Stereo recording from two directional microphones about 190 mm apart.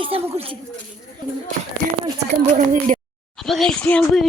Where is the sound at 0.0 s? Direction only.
30° right (ahead or behind).